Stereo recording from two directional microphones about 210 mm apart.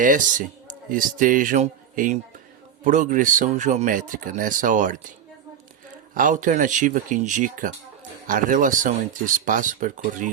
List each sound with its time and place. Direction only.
0.0 s a man's voice: 40° right (ahead or behind)
6.1 s a man's voice: 40° right (ahead or behind)